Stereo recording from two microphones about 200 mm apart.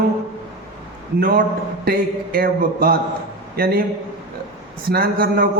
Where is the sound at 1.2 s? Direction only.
45° right (ahead or behind).